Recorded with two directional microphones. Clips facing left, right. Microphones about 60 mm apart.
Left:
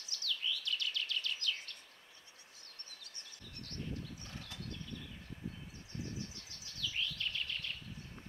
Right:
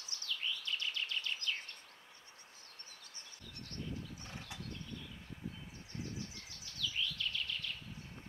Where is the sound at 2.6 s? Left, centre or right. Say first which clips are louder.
Even; left.